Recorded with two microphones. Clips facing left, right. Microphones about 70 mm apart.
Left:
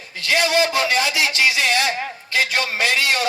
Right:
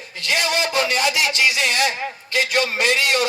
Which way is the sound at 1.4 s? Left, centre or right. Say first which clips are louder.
Left 4 dB; left.